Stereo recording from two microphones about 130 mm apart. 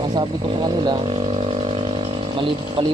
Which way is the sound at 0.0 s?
35° right (ahead or behind).